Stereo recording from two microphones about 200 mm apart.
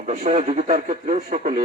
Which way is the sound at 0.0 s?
40° right (ahead or behind).